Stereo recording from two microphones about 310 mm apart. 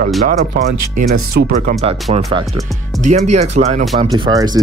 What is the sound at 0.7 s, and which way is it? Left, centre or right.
Speech, right.